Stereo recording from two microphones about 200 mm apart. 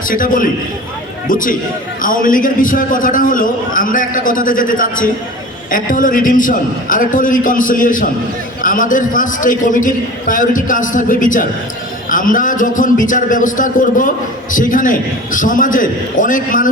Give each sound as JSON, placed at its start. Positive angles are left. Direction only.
{"t": 0.1, "sound": "a man's voice", "side_deg": 45}